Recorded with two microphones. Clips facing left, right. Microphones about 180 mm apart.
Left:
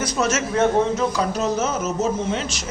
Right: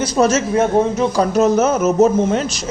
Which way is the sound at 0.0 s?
30° right (ahead or behind).